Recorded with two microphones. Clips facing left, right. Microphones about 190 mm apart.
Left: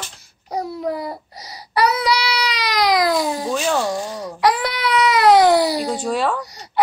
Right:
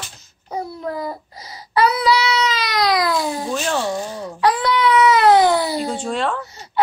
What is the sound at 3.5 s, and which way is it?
Speech, 5° left (ahead or behind).